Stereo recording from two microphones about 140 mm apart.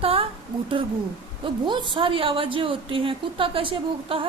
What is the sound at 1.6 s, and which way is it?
A woman's voice, 35° right (ahead or behind).